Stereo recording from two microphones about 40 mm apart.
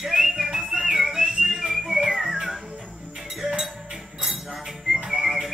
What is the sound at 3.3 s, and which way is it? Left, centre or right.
Music, centre.